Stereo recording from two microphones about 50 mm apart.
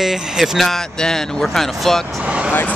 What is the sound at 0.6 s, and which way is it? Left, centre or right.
Speech, centre.